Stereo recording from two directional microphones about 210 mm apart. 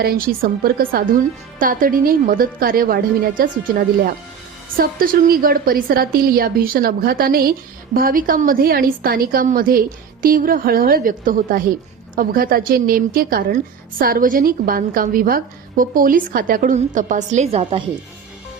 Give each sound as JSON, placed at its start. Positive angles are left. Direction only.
{"t": 0.0, "sound": "a woman's voice", "side_deg": -45}